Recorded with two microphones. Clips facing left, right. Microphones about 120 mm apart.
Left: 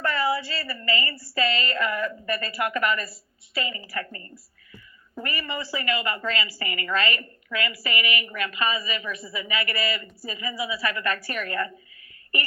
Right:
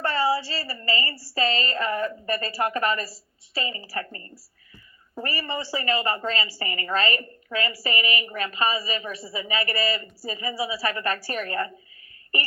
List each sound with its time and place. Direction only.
0.0 s a woman's voice: 30° right (ahead or behind)